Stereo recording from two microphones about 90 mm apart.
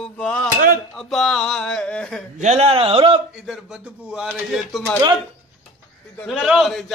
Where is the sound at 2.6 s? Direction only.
90° right.